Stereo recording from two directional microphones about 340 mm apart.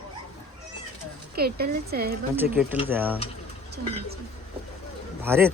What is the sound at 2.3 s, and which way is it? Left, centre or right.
Speech, centre.